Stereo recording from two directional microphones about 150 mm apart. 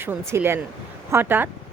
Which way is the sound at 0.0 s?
15° right (ahead or behind).